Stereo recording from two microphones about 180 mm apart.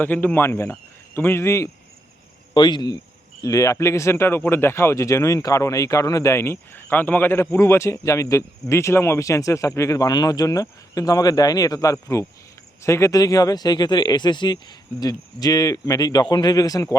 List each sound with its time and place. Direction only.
0.0 s speech: 10° left (ahead or behind)